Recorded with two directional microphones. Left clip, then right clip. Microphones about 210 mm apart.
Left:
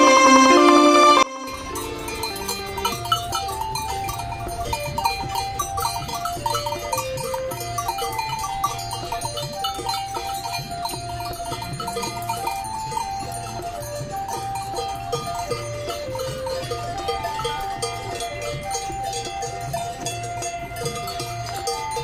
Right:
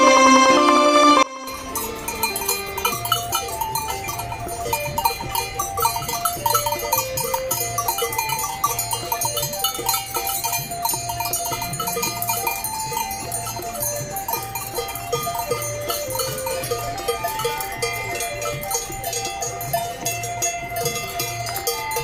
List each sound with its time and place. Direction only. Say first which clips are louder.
0.0 s music: even; centre (ahead or behind)
2.2 s cowbell: right 6 dB; centre (ahead or behind)
4.7 s cowbell: right 2 dB; 5° right (ahead or behind)
6.4 s cowbell: right 5 dB; 30° right (ahead or behind)
9.6 s cowbell: right 1 dB; 55° right (ahead or behind)
14.8 s music: right 1 dB; 20° left (ahead or behind)
17.1 s music: right 2 dB; 5° right (ahead or behind)
20.1 s music: right 3 dB; 35° right (ahead or behind)